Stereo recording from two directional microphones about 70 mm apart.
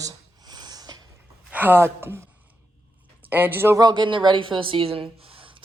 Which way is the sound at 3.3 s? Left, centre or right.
Right.